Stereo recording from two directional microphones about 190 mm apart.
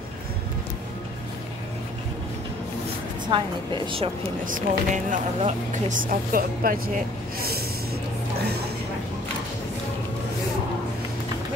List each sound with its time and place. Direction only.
3.3 s a woman's voice: 25° right (ahead or behind)
4.5 s speech: 45° right (ahead or behind)